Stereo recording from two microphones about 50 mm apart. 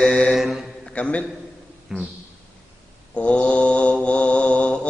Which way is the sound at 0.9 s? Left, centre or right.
Left.